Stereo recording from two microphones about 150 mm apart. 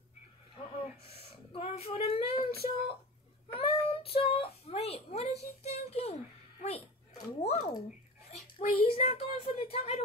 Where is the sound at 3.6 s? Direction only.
40° left (ahead or behind).